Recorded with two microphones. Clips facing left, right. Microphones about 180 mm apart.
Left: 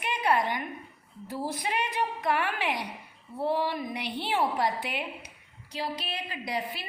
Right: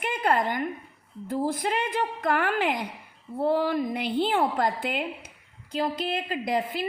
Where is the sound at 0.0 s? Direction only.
50° right (ahead or behind).